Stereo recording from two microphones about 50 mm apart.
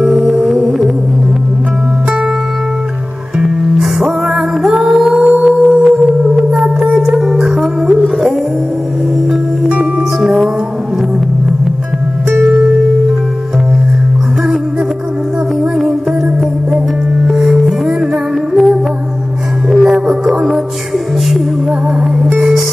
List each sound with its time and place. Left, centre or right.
3.3 s music: centre
6.6 s music: centre
9.7 s music: right
17.3 s music: centre
22.2 s music: centre